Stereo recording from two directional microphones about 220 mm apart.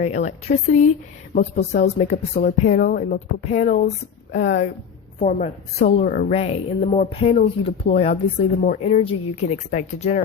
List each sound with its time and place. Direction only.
0.0 s a woman's voice: 30° left (ahead or behind)